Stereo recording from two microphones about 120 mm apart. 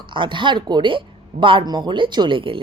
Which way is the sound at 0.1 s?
40° right (ahead or behind).